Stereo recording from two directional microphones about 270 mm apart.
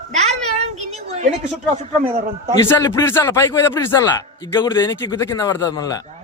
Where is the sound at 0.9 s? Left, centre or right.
Right.